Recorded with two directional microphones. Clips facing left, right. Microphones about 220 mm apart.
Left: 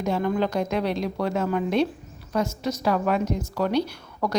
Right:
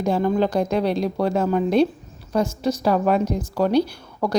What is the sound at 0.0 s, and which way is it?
A woman's voice, 30° right (ahead or behind).